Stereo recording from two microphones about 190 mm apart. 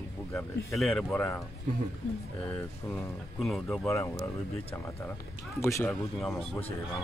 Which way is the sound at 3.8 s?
15° left (ahead or behind).